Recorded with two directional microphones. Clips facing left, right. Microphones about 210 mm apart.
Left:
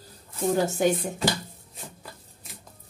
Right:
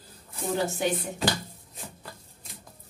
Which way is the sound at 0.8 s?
45° left (ahead or behind).